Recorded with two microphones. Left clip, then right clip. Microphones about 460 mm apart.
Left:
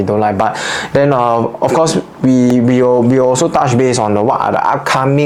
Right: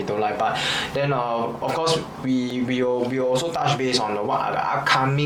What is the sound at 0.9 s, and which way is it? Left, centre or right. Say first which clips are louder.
Speech: left 16 dB; left.